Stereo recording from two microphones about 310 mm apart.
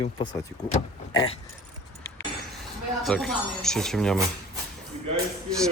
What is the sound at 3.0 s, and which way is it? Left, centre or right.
Speech, centre.